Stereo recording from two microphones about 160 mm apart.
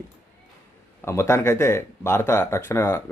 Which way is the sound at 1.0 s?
15° left (ahead or behind).